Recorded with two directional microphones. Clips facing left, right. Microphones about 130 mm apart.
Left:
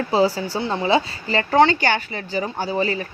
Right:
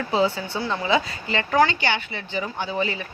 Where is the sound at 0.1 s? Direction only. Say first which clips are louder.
Left 3 dB; 35° left (ahead or behind).